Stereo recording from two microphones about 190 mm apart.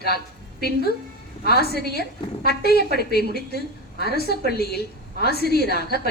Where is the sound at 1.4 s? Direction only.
55° left (ahead or behind).